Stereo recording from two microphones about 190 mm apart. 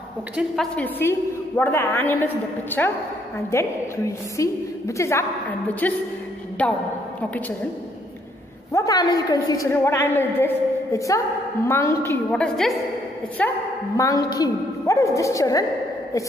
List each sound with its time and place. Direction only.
0.4 s a woman's voice: 5° left (ahead or behind)
8.7 s a woman's voice: 20° left (ahead or behind)
13.9 s a woman's voice: 20° left (ahead or behind)